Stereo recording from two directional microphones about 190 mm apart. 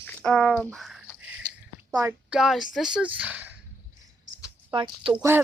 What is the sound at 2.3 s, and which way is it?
Speech, centre (ahead or behind).